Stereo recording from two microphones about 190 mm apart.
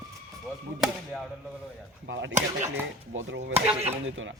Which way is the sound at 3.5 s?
35° right (ahead or behind).